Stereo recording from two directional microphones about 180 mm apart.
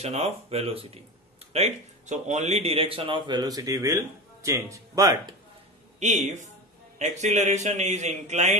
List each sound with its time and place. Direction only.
0.0 s a man's voice: 35° right (ahead or behind); by 5.2 s 20° right (ahead or behind)
5.9 s a man's voice: 40° right (ahead or behind)